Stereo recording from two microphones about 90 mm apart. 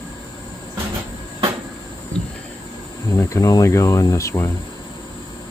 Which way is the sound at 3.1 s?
40° left (ahead or behind).